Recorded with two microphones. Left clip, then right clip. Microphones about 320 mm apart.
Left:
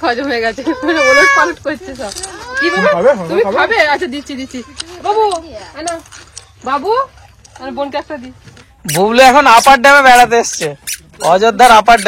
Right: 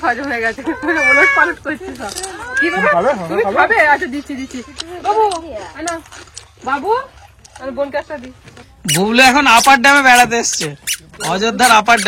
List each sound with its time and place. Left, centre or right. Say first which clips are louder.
0.0 s speech: left 2 dB; left
4.5 s a man's voice: left 1 dB; centre
7.5 s speech: left 1 dB; centre
8.8 s a man's voice: left 3 dB; centre